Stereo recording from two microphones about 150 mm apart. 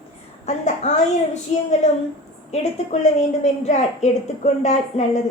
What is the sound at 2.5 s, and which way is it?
A woman's voice, 50° left (ahead or behind).